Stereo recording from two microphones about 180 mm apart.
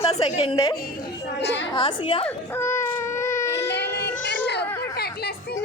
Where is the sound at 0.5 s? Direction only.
20° left (ahead or behind).